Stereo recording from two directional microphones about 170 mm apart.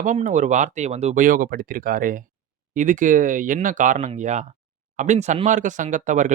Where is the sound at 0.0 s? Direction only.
45° right (ahead or behind).